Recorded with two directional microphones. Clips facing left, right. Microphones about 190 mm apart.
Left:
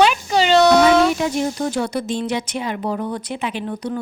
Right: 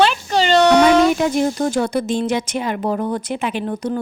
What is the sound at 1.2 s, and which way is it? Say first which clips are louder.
Speech: right 3 dB; 50° right (ahead or behind).